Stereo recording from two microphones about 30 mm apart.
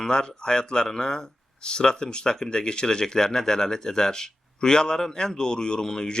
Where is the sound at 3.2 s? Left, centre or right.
Centre.